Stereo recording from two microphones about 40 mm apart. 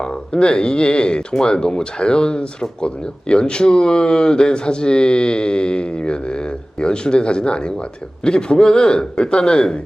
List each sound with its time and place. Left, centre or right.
0.0 s speech: left